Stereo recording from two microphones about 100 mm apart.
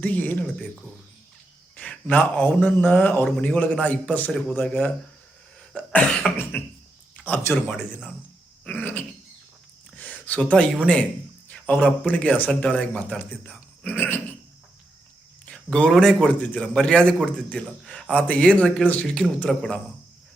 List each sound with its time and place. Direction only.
0.0 s speech: 15° left (ahead or behind)
1.7 s a man's voice: 10° left (ahead or behind)
8.6 s speech: 15° left (ahead or behind)
9.9 s a sound: 15° left (ahead or behind)
11.4 s speech: 15° left (ahead or behind)
15.4 s a sound: 10° left (ahead or behind)
15.9 s speech: 5° left (ahead or behind)